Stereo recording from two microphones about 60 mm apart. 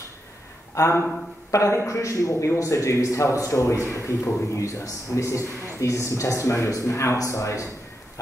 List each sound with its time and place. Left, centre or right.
0.7 s a man's voice: left